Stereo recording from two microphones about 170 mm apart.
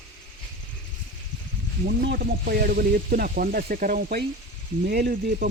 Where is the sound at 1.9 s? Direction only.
60° right (ahead or behind).